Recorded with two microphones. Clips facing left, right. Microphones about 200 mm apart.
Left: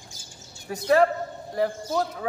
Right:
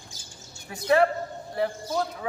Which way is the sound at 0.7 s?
40° left (ahead or behind).